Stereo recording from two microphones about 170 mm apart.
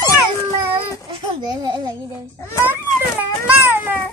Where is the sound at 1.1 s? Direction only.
25° right (ahead or behind).